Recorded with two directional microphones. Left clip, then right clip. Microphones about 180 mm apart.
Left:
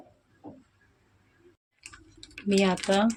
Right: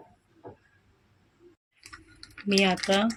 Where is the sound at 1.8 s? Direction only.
25° left (ahead or behind).